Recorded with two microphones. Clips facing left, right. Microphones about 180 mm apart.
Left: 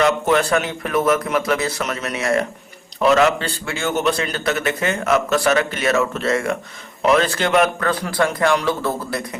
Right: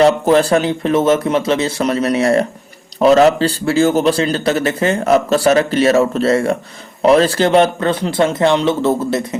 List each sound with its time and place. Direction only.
0.0 s speech: 35° right (ahead or behind)